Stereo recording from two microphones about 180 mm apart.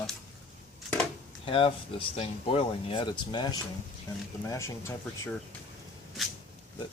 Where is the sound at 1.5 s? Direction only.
30° left (ahead or behind).